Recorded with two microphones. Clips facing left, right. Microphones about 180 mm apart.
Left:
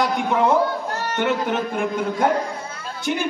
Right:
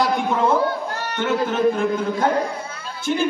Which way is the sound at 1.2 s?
15° left (ahead or behind).